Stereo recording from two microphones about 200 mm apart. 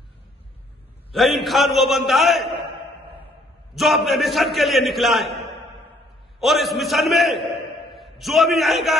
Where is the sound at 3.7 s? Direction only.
Centre (ahead or behind).